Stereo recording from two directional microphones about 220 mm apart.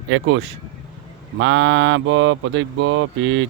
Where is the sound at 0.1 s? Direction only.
55° right (ahead or behind).